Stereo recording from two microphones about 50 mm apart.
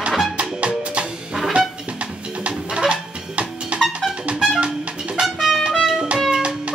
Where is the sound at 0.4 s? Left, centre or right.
Right.